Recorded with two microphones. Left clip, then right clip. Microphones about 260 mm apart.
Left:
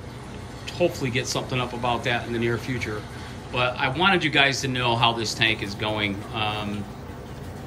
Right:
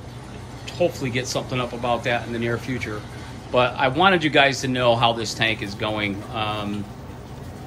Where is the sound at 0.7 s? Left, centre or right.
Centre.